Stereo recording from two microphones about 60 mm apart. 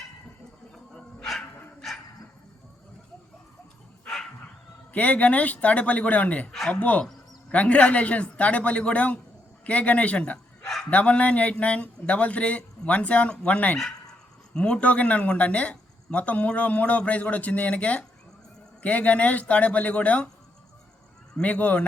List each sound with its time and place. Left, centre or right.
0.9 s dog: centre
4.9 s speech: left
21.4 s speech: left